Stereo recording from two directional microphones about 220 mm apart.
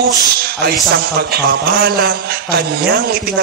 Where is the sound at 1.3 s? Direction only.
45° right (ahead or behind).